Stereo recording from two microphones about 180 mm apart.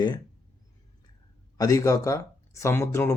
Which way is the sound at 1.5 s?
20° left (ahead or behind).